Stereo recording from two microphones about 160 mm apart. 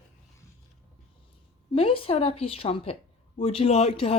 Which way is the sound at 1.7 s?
35° left (ahead or behind).